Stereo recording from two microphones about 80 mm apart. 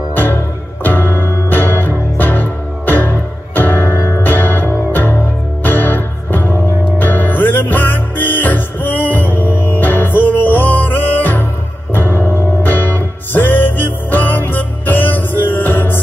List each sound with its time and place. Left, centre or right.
0.1 s music: left